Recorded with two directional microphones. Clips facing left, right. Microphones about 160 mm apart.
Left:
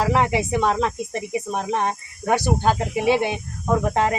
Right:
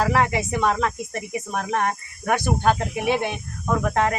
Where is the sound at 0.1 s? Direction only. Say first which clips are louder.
Left 2 dB; 20° left (ahead or behind).